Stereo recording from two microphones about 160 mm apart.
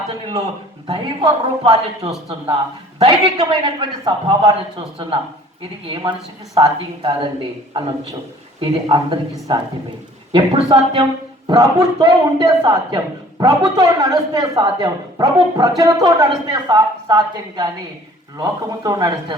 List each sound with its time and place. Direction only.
0.9 s a man's voice: 35° right (ahead or behind)
8.6 s a man's voice: 30° right (ahead or behind)
10.3 s a woman's voice: 30° right (ahead or behind)